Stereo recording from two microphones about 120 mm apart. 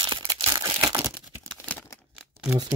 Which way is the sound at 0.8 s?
25° right (ahead or behind).